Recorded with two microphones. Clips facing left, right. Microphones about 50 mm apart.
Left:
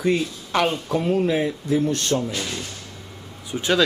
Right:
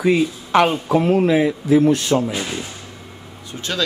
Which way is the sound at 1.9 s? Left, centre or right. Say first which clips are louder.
Right 5 dB; centre.